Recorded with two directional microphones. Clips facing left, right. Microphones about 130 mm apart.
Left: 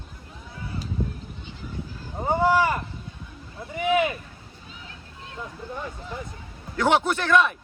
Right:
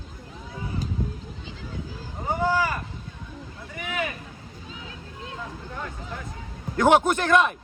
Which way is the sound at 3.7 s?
20° left (ahead or behind).